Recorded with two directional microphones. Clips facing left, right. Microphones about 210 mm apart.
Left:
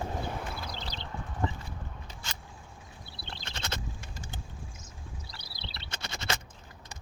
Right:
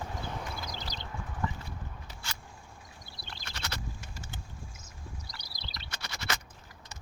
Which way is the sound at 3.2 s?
25° left (ahead or behind).